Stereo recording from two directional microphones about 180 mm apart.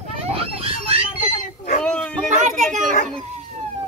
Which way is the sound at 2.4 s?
40° right (ahead or behind).